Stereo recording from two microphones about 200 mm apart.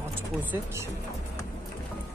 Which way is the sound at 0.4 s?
10° right (ahead or behind).